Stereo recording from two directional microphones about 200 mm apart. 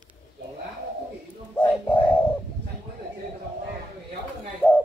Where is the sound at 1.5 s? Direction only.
5° left (ahead or behind).